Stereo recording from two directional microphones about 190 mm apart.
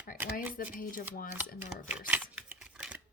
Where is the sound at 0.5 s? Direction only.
45° left (ahead or behind).